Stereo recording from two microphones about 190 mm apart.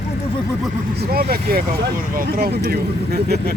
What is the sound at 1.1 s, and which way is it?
Speech, 50° right (ahead or behind).